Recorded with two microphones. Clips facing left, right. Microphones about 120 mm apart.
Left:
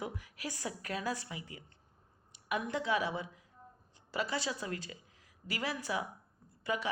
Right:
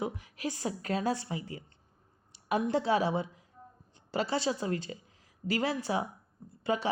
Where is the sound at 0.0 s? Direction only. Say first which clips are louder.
Right 6 dB; 20° right (ahead or behind).